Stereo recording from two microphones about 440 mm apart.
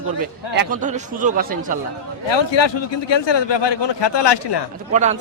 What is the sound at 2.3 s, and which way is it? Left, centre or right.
A man's voice, left.